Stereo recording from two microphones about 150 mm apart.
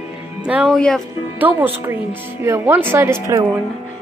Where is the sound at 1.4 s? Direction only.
15° right (ahead or behind).